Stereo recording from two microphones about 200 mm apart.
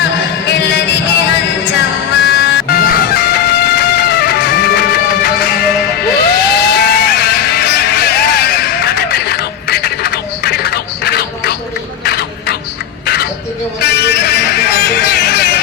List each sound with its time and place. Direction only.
0.9 s music: 60° left (ahead or behind)
12.0 s a sound: 55° left (ahead or behind)
13.7 s music: 55° left (ahead or behind)